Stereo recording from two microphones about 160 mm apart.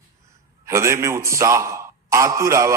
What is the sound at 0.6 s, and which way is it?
A man's voice, 15° right (ahead or behind).